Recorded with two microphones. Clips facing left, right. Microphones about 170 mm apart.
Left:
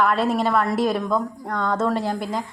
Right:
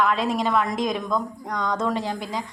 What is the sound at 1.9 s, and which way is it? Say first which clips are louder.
Speech: left 3 dB; 45° left (ahead or behind).